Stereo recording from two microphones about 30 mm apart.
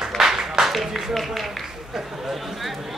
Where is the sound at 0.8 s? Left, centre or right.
Centre.